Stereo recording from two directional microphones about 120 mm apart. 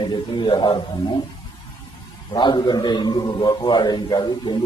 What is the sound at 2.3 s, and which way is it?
A man's voice, 35° left (ahead or behind).